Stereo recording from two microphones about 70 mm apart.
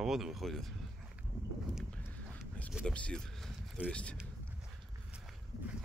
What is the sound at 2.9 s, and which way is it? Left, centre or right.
Speech, centre.